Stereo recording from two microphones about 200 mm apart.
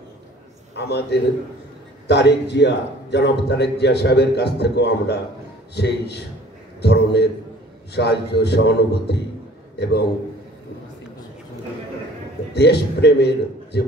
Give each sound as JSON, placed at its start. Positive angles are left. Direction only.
{"t": 0.7, "sound": "a man's voice", "side_deg": 55}
{"t": 12.5, "sound": "a man's voice", "side_deg": 55}